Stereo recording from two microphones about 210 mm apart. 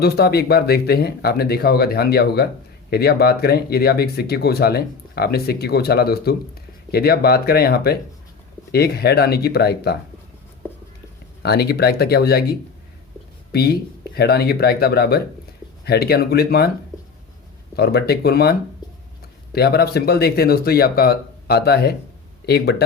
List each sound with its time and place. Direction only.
0.0 s speech: 50° left (ahead or behind)
10.6 s a sound: 10° left (ahead or behind)
11.4 s speech: 50° left (ahead or behind)
17.7 s speech: 50° left (ahead or behind)
19.5 s speech: 50° left (ahead or behind)